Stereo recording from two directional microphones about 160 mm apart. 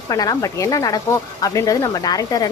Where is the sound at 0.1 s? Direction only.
20° left (ahead or behind).